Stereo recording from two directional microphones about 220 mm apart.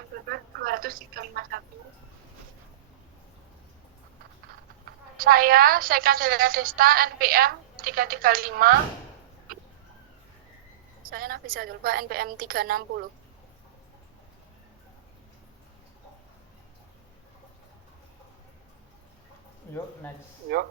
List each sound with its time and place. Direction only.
0.3 s a sound: 40° right (ahead or behind)
5.1 s a woman's voice: 40° right (ahead or behind)
11.0 s a woman's voice: 40° right (ahead or behind)